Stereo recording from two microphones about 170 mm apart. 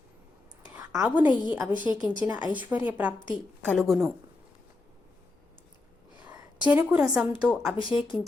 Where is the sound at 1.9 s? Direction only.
25° left (ahead or behind).